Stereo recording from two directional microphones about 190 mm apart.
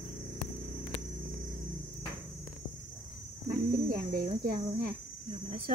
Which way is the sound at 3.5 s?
50° right (ahead or behind).